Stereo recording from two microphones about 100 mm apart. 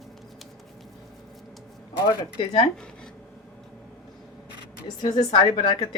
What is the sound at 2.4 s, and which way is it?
Speech, 65° left (ahead or behind).